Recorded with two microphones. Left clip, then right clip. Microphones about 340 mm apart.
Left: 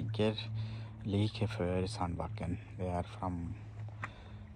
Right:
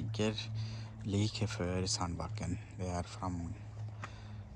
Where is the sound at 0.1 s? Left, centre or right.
Centre.